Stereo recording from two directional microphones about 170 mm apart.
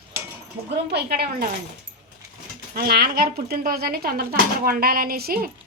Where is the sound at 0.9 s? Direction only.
65° right (ahead or behind).